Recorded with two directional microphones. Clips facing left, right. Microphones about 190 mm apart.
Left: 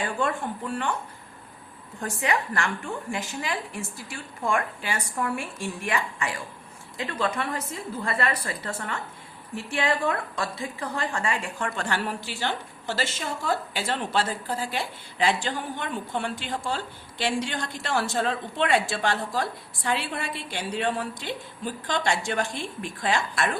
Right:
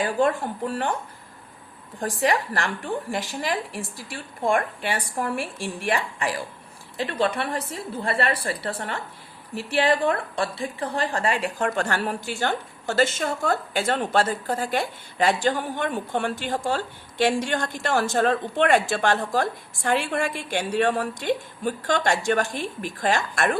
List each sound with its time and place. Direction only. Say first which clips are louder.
0.0 s a woman's voice: right 5 dB; 35° right (ahead or behind)
2.0 s a woman's voice: right 4 dB; 35° right (ahead or behind)